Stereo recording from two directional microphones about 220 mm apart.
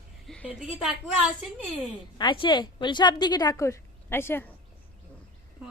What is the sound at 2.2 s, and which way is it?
A woman's voice, 20° left (ahead or behind).